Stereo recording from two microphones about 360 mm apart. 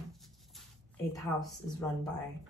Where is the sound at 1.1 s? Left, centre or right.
Centre.